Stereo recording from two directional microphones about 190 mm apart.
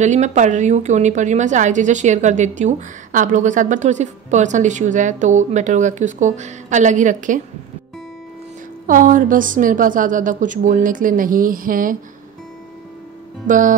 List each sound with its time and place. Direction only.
0.0 s a woman's voice: 40° right (ahead or behind)
8.8 s a woman's voice: 45° right (ahead or behind)
13.5 s a woman's voice: 45° right (ahead or behind)